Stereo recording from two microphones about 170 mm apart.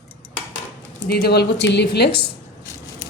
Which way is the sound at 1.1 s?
70° left (ahead or behind).